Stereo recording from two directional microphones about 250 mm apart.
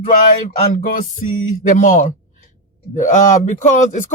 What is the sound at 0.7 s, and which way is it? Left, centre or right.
Music, left.